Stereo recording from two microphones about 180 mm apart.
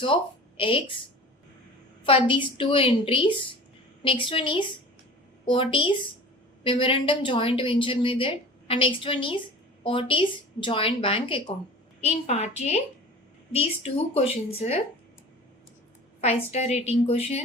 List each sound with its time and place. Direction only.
0.0 s a woman's voice: 30° left (ahead or behind)
2.0 s a woman's voice: 30° left (ahead or behind)
16.2 s speech: 35° left (ahead or behind)